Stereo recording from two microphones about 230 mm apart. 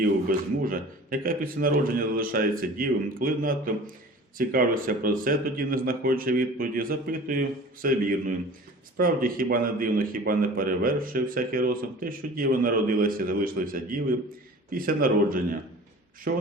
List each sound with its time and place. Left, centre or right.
0.0 s a man's voice: right